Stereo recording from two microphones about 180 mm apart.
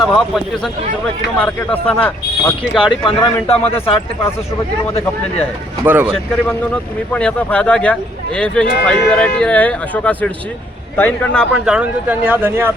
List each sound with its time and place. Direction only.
0.0 s speech: centre (ahead or behind)
3.1 s speech: 25° left (ahead or behind)
5.8 s speech: 10° right (ahead or behind)
7.1 s speech: 5° left (ahead or behind)
11.6 s speech: 5° right (ahead or behind)